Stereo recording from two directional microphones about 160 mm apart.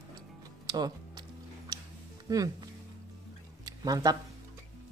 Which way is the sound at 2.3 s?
25° right (ahead or behind).